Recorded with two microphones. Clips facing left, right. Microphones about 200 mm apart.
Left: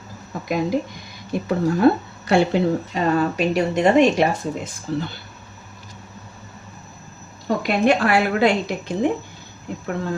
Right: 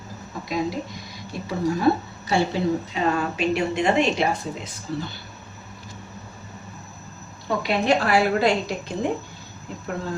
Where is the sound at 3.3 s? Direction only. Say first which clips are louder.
Left 3 dB; 40° left (ahead or behind).